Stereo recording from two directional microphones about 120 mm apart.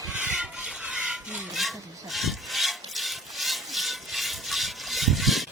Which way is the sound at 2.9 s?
Centre (ahead or behind).